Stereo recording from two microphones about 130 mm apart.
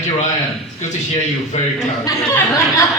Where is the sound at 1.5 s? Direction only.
55° left (ahead or behind).